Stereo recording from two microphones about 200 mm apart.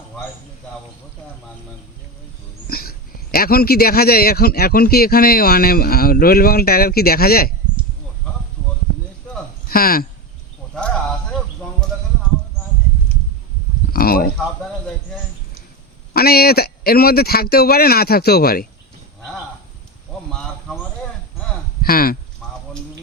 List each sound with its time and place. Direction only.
2.6 s a man's voice: 50° left (ahead or behind)
9.6 s speech: 50° left (ahead or behind)
13.9 s speech: 50° left (ahead or behind)
16.1 s a man's voice: 50° left (ahead or behind)
20.3 s a sound: 5° left (ahead or behind)
21.8 s speech: 50° left (ahead or behind)
22.4 s a sound: 5° left (ahead or behind)